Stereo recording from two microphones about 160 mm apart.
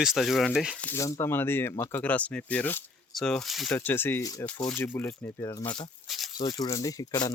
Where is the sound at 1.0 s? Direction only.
20° left (ahead or behind).